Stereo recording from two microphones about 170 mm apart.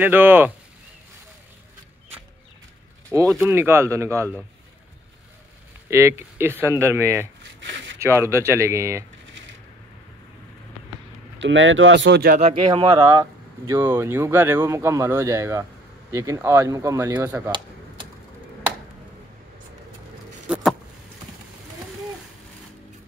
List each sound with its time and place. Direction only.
0.0 s speech: 10° right (ahead or behind)
3.1 s speech: 15° right (ahead or behind)
5.9 s speech: 15° right (ahead or behind)
7.6 s a sound: 90° right
8.0 s speech: 15° right (ahead or behind)
11.3 s speech: 90° right
12.6 s speech: 25° right (ahead or behind)
20.4 s a sound: 5° right (ahead or behind)